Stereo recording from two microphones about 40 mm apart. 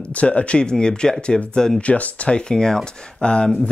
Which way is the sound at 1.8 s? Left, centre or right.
Left.